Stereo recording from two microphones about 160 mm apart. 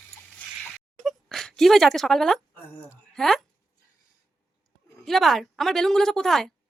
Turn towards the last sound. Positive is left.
turn(degrees=5)  # may be behind; listen again after turning